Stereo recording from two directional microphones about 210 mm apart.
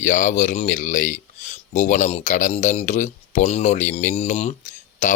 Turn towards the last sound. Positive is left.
turn(degrees=35)  # may be behind; listen again after turning